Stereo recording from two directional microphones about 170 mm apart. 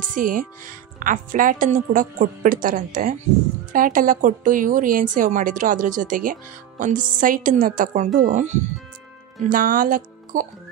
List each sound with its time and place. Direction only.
0.1 s speech: 50° right (ahead or behind)